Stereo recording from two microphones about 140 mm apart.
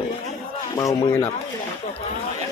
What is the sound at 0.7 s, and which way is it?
Speech, 25° left (ahead or behind).